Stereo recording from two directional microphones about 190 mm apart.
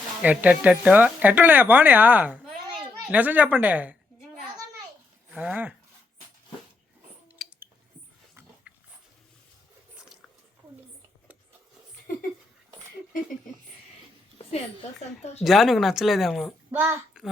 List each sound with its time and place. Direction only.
0.2 s speech: 5° right (ahead or behind)
5.3 s speech: 5° right (ahead or behind)
7.4 s a sound: centre (ahead or behind)
8.7 s dog: 5° right (ahead or behind)
15.2 s a woman's voice: 35° left (ahead or behind)
15.4 s speech: centre (ahead or behind)
16.7 s speech: 10° right (ahead or behind)